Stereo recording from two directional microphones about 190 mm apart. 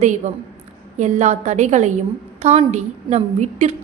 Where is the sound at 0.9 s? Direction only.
35° right (ahead or behind).